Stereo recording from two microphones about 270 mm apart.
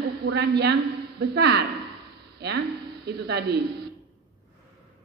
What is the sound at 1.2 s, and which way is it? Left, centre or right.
Speech, right.